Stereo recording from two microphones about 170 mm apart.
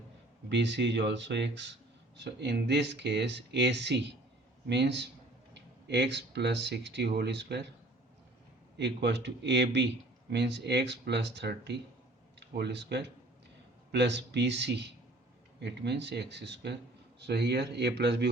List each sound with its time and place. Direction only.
0.4 s speech: 90° right
2.1 s speech: 80° right
8.8 s speech: 90° right